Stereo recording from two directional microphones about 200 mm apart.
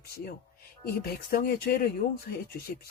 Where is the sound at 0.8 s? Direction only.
50° left (ahead or behind).